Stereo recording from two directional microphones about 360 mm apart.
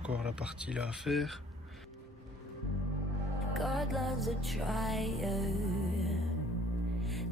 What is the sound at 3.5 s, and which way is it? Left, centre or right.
Music, centre.